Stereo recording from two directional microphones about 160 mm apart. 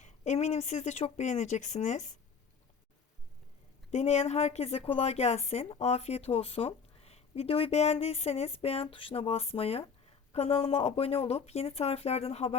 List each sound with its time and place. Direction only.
0.0 s speech: 45° left (ahead or behind)
3.9 s a woman's voice: 45° left (ahead or behind)